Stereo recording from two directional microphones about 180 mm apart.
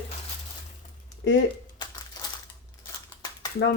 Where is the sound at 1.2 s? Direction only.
90° left.